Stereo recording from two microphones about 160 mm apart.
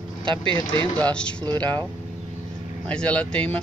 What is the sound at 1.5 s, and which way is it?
Speech, 25° right (ahead or behind).